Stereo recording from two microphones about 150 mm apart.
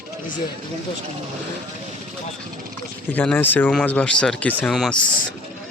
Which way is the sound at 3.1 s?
10° left (ahead or behind).